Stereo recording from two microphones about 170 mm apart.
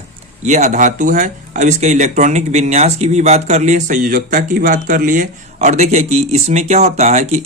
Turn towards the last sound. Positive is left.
turn(degrees=-40)  # may be behind; listen again after turning